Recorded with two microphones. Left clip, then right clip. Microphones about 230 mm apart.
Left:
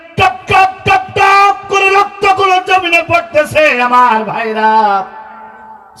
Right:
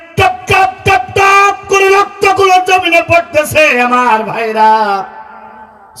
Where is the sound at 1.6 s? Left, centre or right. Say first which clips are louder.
Right 1 dB; right.